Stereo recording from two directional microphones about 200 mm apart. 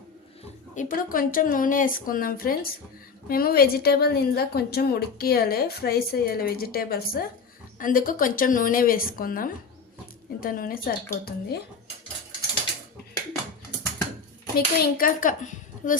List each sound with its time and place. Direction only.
0.8 s a woman's voice: 45° left (ahead or behind)
14.5 s speech: 45° left (ahead or behind)